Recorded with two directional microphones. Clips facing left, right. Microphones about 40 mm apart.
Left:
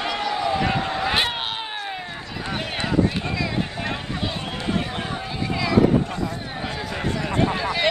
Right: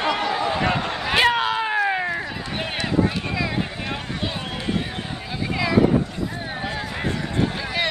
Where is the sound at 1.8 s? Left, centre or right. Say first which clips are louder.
Right 9 dB; right.